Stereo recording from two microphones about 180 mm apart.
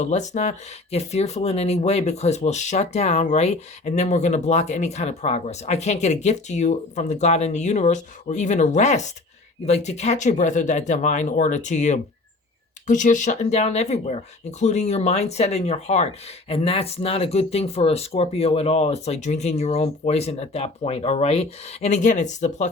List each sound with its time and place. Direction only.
0.0 s speech: 40° left (ahead or behind)